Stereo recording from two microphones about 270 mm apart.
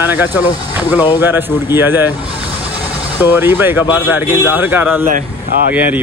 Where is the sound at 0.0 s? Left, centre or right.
Centre.